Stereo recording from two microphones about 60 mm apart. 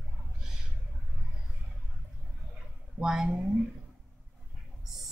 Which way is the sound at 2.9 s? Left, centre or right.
Centre.